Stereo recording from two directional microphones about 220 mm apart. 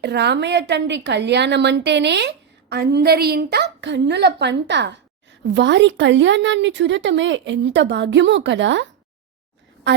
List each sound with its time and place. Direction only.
0.0 s a woman's voice: 50° right (ahead or behind)